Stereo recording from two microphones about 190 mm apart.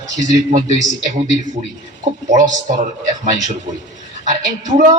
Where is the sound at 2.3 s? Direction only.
40° right (ahead or behind).